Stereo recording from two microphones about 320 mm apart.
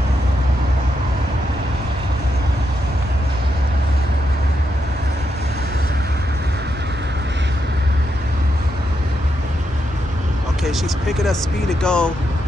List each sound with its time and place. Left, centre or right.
10.6 s speech: centre